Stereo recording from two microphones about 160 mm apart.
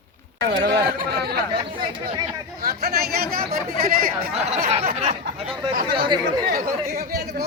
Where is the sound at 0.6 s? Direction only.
90° right.